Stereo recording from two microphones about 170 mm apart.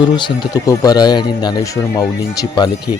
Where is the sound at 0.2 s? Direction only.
25° left (ahead or behind).